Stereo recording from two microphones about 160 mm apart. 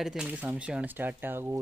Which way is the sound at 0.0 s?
5° right (ahead or behind).